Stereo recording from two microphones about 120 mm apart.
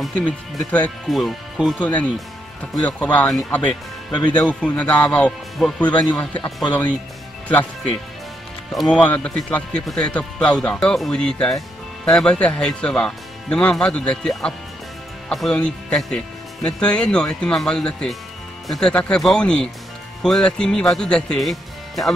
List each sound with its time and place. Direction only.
0.0 s speech: 10° left (ahead or behind)
1.0 s speech: centre (ahead or behind)
1.8 s speech: 10° left (ahead or behind)
3.3 s speech: 10° left (ahead or behind)
4.1 s speech: 35° left (ahead or behind)
4.5 s speech: 10° left (ahead or behind)
6.4 s speech: 35° left (ahead or behind)
8.9 s speech: 10° left (ahead or behind)